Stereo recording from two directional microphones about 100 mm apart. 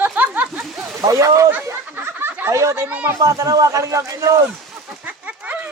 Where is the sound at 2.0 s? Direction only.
20° right (ahead or behind).